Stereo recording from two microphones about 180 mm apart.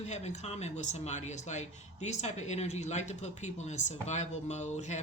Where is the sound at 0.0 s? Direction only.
40° left (ahead or behind).